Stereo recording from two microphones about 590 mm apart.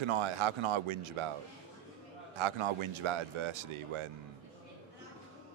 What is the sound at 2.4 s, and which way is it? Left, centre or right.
Speech, right.